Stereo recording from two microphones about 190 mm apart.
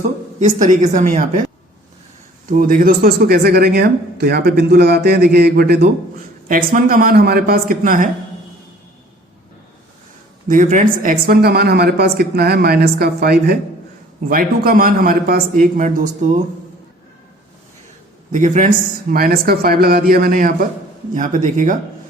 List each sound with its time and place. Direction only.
0.3 s a woman's voice: 40° right (ahead or behind)
2.5 s speech: 45° right (ahead or behind)
10.5 s speech: 45° right (ahead or behind)
18.3 s a woman's voice: 40° right (ahead or behind)
19.1 s a woman's voice: 50° right (ahead or behind)